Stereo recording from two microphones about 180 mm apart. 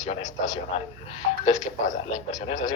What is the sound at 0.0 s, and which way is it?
A man's voice, 45° left (ahead or behind).